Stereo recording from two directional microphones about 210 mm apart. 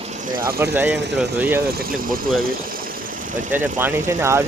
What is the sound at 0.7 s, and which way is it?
Speech, 10° right (ahead or behind).